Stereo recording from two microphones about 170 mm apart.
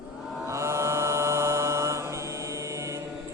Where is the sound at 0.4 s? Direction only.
15° right (ahead or behind).